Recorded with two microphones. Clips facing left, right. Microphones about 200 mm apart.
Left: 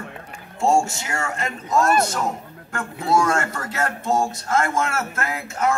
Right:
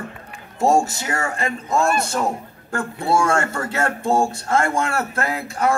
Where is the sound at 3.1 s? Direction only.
30° right (ahead or behind).